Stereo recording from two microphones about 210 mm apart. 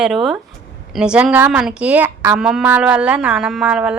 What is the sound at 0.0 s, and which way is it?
A woman's voice, centre (ahead or behind).